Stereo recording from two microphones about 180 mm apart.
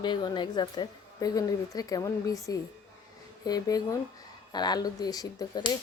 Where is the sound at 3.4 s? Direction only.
20° left (ahead or behind).